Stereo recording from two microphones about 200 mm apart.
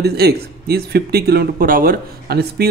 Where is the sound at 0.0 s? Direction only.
50° right (ahead or behind).